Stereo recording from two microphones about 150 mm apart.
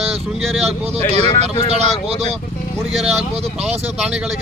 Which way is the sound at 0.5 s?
Centre (ahead or behind).